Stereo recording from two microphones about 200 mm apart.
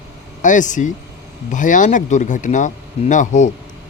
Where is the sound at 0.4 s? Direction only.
40° left (ahead or behind).